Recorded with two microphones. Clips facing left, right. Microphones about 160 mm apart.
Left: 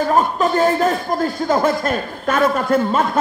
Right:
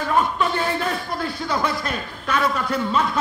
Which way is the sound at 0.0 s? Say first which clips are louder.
Left 5 dB; 40° left (ahead or behind).